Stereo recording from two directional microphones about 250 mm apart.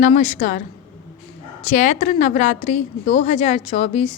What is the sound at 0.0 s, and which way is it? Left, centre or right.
Speech, left.